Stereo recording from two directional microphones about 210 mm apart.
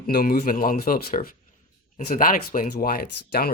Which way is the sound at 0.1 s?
45° left (ahead or behind).